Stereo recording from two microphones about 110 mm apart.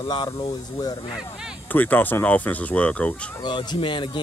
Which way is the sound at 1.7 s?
15° left (ahead or behind).